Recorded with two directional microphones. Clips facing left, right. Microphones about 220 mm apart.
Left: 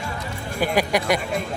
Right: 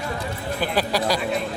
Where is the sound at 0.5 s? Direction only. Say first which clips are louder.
Left 3 dB; 15° left (ahead or behind).